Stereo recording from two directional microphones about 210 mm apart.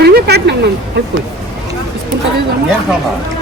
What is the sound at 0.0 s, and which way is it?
Speech, 50° right (ahead or behind).